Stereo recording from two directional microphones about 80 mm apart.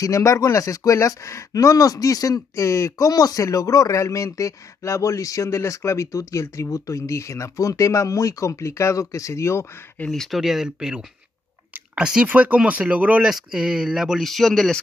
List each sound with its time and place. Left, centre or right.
0.0 s speech: left
10.0 s speech: centre
11.7 s chewing: centre
12.3 s speech: centre